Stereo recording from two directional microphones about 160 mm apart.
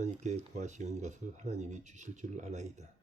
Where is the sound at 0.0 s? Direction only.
50° right (ahead or behind).